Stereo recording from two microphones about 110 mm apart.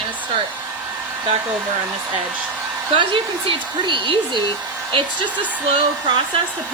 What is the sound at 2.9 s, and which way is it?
Speech, 50° right (ahead or behind).